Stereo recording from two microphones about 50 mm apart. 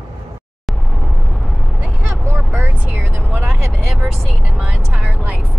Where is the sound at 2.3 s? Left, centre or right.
Right.